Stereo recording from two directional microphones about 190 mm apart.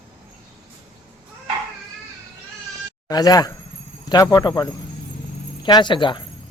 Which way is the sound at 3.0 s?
20° left (ahead or behind).